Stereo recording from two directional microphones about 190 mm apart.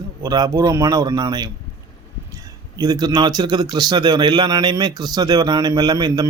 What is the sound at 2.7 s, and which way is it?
Speech, 20° right (ahead or behind).